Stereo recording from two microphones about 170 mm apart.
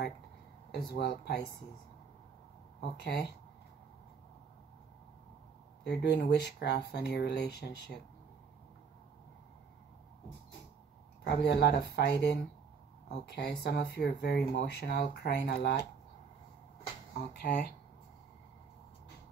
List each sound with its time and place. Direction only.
0.7 s speech: 70° left (ahead or behind)
2.8 s speech: 80° left
5.9 s speech: 75° left (ahead or behind)
11.2 s speech: 85° left
17.3 s speech: 70° left (ahead or behind)